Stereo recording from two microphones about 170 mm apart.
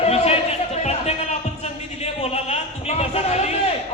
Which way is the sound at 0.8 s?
40° left (ahead or behind).